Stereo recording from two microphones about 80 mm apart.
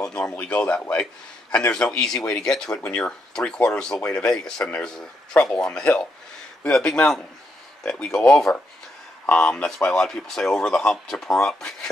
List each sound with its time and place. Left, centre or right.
0.1 s speech: centre